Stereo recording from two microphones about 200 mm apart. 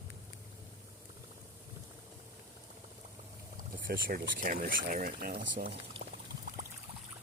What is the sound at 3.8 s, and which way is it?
Speech, 45° right (ahead or behind).